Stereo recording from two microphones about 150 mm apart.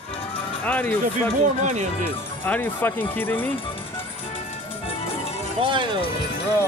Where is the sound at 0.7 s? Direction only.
10° left (ahead or behind).